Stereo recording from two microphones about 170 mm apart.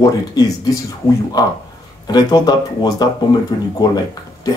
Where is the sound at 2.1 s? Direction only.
25° left (ahead or behind).